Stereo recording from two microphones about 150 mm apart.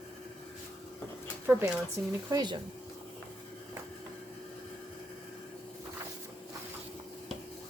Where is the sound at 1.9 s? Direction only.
25° right (ahead or behind).